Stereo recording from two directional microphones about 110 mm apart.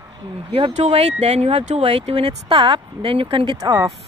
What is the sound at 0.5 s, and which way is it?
Speech, 55° right (ahead or behind).